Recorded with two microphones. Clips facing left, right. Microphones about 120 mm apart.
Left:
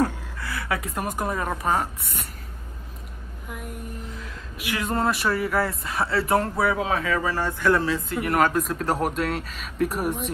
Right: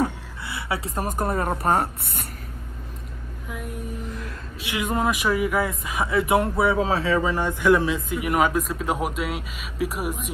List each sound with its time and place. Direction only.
0.4 s speech: 25° right (ahead or behind); by 1.6 s 40° right (ahead or behind)
1.6 s speech: 50° right (ahead or behind)
3.4 s music: centre (ahead or behind)
4.0 s a sound: 60° right (ahead or behind)
4.7 s speech: 10° right (ahead or behind)
6.6 s speech: 30° right (ahead or behind)
7.2 s speech: 20° right (ahead or behind)